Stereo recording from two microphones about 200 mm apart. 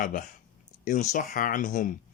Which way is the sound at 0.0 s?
45° left (ahead or behind).